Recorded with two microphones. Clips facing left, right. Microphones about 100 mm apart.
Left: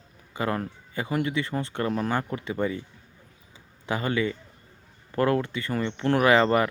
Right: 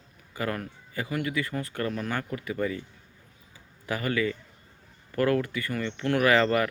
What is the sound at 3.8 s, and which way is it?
A man's voice, 25° left (ahead or behind).